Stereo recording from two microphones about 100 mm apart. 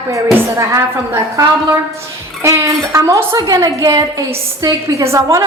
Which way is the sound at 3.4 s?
40° right (ahead or behind).